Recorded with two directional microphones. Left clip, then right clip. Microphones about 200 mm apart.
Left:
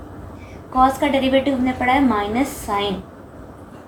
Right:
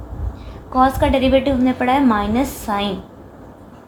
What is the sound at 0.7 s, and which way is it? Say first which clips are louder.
A woman's voice: right 1 dB; 45° right (ahead or behind).